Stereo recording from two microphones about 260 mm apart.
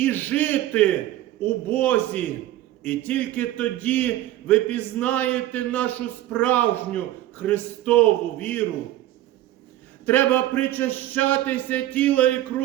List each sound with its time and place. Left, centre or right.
0.0 s a man's voice: centre
10.1 s a man's voice: centre